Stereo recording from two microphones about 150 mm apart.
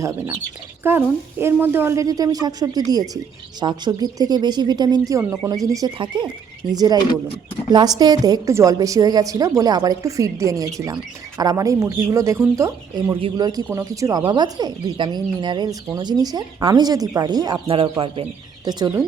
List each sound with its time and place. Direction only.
0.0 s speech: 20° right (ahead or behind)
18.6 s speech: 30° right (ahead or behind)